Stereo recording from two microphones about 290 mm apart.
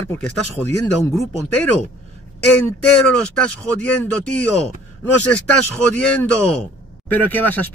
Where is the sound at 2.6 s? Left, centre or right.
Centre.